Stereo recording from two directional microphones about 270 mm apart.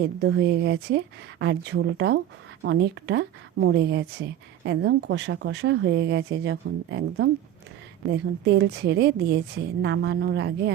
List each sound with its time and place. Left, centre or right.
0.2 s speech: right